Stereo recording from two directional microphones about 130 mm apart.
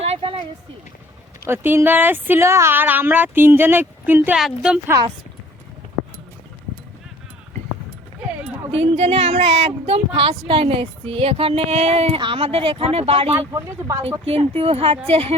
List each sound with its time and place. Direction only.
0.0 s a sound: 45° right (ahead or behind)
1.5 s speech: 15° right (ahead or behind)
4.4 s a woman's voice: 5° right (ahead or behind)
8.7 s speech: 50° right (ahead or behind)
13.5 s speech: 25° right (ahead or behind)
14.3 s speech: 50° right (ahead or behind)